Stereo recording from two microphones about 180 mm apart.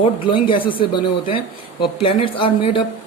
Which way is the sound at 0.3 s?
30° left (ahead or behind).